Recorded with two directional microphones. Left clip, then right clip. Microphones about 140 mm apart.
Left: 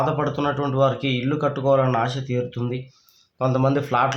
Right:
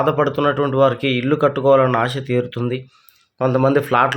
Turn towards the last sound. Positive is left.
turn(degrees=-40)  # may be behind; listen again after turning